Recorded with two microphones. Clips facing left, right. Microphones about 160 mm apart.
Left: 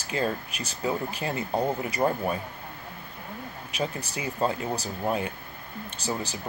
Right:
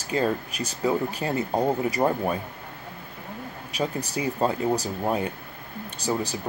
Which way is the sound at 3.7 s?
35° right (ahead or behind).